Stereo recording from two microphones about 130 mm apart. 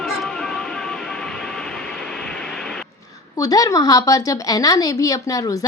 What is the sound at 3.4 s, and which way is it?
A woman's voice, 25° left (ahead or behind).